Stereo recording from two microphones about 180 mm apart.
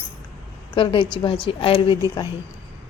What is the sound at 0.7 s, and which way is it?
A woman's voice, 30° left (ahead or behind).